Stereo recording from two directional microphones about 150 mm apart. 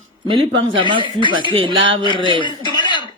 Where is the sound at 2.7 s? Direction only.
30° left (ahead or behind).